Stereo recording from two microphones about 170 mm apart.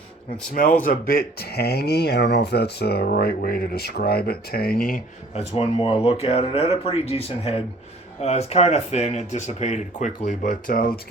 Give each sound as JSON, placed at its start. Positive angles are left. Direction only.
{"t": 0.5, "sound": "a man's voice", "side_deg": 55}
{"t": 5.3, "sound": "speech", "side_deg": 40}